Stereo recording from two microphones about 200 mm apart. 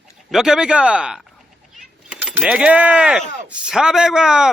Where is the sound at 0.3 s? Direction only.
Centre (ahead or behind).